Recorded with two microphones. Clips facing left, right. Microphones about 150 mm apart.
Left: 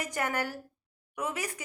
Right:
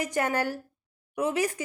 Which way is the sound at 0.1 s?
25° right (ahead or behind).